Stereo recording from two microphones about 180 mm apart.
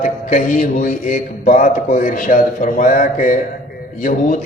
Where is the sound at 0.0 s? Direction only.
45° left (ahead or behind).